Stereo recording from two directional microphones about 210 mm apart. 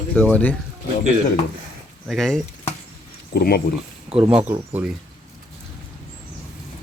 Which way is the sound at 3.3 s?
45° left (ahead or behind).